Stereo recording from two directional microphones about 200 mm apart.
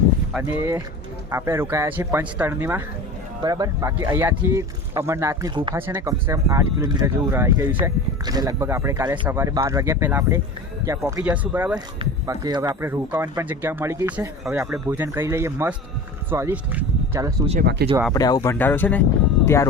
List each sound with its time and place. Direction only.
0.4 s speech: 15° right (ahead or behind)
17.6 s speech: 55° right (ahead or behind)
18.1 s speech: 20° left (ahead or behind)